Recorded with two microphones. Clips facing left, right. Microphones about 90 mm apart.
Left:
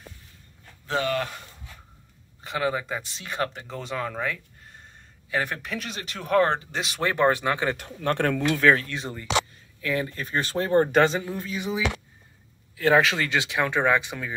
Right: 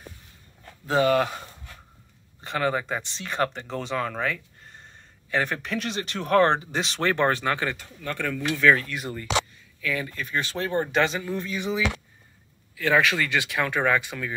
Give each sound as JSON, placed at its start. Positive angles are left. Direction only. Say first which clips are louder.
{"t": 0.8, "sound": "speech", "louder": "right 5 dB", "side_deg": -10}
{"t": 2.4, "sound": "speech", "louder": "right 1 dB", "side_deg": 5}
{"t": 7.7, "sound": "speech", "louder": "left 7 dB", "side_deg": 65}
{"t": 8.6, "sound": "speech", "louder": "right 2 dB", "side_deg": 30}
{"t": 11.2, "sound": "speech", "louder": "right 2 dB", "side_deg": 10}
{"t": 12.7, "sound": "speech", "louder": "left 2 dB", "side_deg": 30}